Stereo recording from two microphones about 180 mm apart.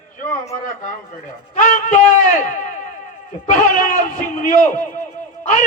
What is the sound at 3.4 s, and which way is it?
A man's voice, 45° left (ahead or behind).